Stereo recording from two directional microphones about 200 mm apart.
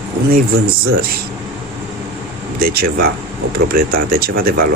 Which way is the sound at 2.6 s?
50° right (ahead or behind).